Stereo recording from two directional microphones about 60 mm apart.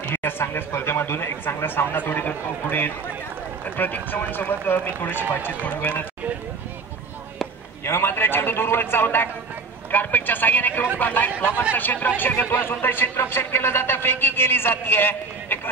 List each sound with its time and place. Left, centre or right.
0.0 s a man's voice: left
7.8 s a man's voice: left